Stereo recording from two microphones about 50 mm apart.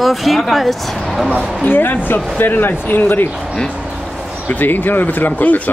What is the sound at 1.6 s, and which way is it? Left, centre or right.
Speech, left.